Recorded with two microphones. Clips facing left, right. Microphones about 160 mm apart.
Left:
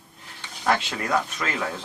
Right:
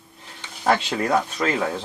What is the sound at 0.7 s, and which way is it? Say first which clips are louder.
Speech: right 4 dB; 30° right (ahead or behind).